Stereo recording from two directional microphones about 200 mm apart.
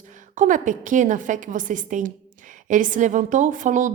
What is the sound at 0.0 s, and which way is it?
A woman's voice, 40° right (ahead or behind).